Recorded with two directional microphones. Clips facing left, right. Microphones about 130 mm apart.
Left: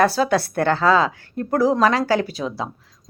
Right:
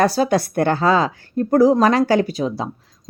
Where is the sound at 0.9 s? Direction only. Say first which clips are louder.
Right 1 dB; 40° right (ahead or behind).